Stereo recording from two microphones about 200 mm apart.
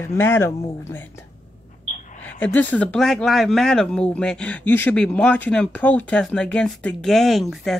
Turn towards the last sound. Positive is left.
turn(degrees=0)  # may be behind; listen again after turning